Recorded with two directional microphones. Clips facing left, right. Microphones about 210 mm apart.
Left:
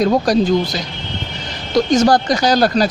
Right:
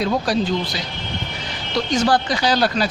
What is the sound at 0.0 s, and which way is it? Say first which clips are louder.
Speech: left 6 dB; 45° left (ahead or behind).